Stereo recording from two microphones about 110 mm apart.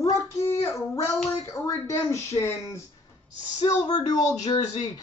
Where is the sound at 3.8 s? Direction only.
35° left (ahead or behind).